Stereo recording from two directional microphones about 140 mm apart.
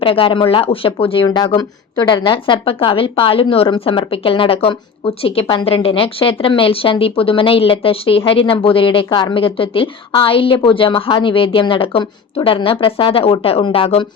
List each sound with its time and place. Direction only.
0.0 s speech: 40° left (ahead or behind)